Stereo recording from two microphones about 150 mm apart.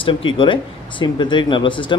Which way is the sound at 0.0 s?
35° left (ahead or behind).